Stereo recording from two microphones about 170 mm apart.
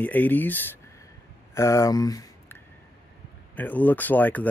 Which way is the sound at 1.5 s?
15° left (ahead or behind).